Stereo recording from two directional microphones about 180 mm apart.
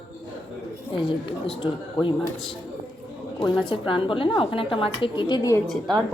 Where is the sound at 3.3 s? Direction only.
25° left (ahead or behind).